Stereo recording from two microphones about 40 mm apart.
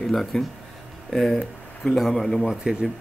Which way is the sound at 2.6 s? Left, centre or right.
Centre.